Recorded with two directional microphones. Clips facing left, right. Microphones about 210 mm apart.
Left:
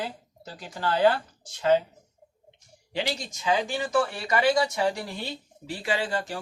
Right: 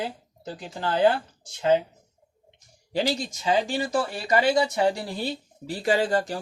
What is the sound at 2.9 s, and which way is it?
Speech, 35° right (ahead or behind).